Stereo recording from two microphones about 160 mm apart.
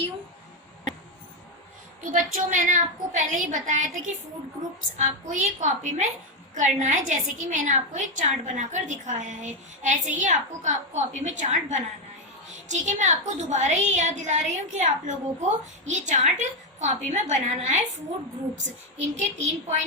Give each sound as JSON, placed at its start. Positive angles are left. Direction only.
{"t": 2.1, "sound": "a woman's voice", "side_deg": -55}
{"t": 19.1, "sound": "a woman's voice", "side_deg": -45}